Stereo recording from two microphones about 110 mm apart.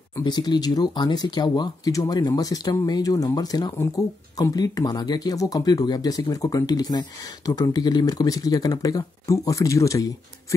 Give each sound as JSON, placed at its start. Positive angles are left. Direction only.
{"t": 0.2, "sound": "speech", "side_deg": 40}